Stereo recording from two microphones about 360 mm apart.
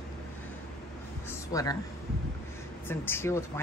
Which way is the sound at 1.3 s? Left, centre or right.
Centre.